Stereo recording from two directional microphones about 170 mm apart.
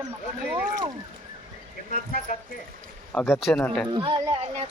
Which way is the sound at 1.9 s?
50° left (ahead or behind).